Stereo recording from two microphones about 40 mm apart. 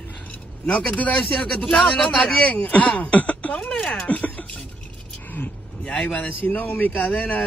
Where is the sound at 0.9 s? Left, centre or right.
Left.